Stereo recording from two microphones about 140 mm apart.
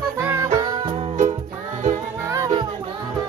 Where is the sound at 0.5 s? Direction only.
30° right (ahead or behind).